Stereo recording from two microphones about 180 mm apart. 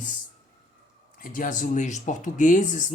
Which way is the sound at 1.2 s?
50° left (ahead or behind).